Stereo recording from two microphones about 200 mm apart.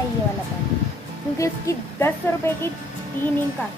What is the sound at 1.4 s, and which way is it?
A woman's voice, 15° left (ahead or behind).